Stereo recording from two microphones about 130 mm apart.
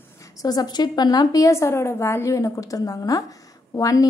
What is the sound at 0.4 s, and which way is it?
A woman's voice, 30° left (ahead or behind).